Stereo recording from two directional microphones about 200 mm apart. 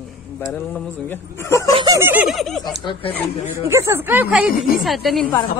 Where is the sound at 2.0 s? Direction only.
10° right (ahead or behind).